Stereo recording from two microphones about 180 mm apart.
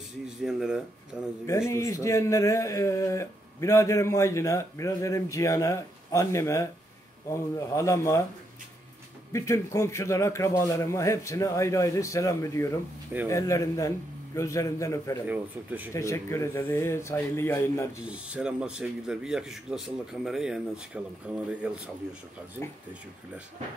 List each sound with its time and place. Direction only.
0.4 s speech: centre (ahead or behind)
1.7 s speech: 15° left (ahead or behind)
9.3 s speech: 15° left (ahead or behind)
15.2 s speech: 10° right (ahead or behind)
15.9 s speech: 15° left (ahead or behind)
18.0 s speech: 5° right (ahead or behind)